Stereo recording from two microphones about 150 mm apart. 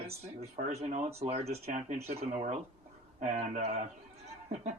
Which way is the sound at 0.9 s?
50° right (ahead or behind).